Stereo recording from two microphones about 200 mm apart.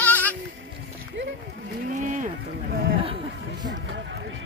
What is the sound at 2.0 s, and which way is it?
Speech, 40° right (ahead or behind).